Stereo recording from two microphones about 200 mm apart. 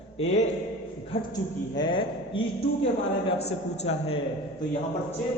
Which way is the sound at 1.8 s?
25° left (ahead or behind).